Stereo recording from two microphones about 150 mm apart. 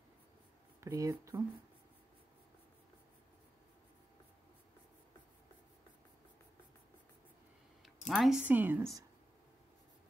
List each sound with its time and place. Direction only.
0.7 s speech: 20° right (ahead or behind)
8.1 s speech: centre (ahead or behind)